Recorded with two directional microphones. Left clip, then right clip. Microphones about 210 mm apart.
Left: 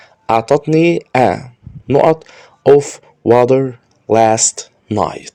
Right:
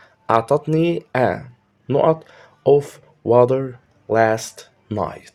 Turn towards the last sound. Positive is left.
turn(degrees=35)  # may be behind; listen again after turning